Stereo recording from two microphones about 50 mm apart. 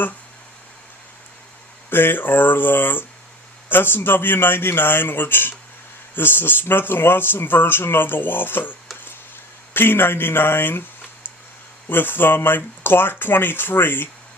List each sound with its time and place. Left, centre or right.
1.9 s speech: left
9.7 s speech: left
11.9 s speech: left